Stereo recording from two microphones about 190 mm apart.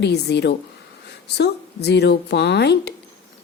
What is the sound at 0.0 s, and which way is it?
A woman's voice, 60° left (ahead or behind).